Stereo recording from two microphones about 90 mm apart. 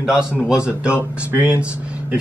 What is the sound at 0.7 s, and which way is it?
Speech, 15° right (ahead or behind).